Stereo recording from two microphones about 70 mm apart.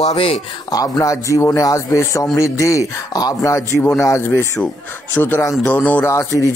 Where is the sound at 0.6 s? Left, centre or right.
Left.